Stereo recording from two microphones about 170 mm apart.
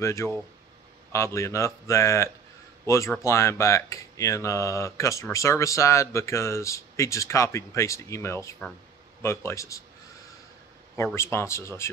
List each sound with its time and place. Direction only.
0.0 s speech: 15° left (ahead or behind)
11.1 s speech: 15° left (ahead or behind)